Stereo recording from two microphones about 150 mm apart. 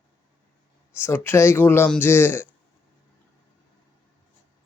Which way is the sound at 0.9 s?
15° left (ahead or behind).